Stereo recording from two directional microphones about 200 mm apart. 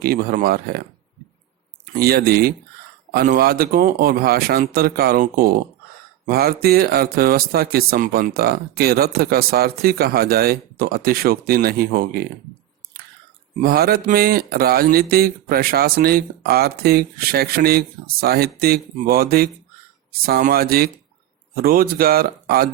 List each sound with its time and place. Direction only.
0.0 s speech: 50° right (ahead or behind)
2.0 s speech: 50° right (ahead or behind)
13.6 s speech: 45° right (ahead or behind)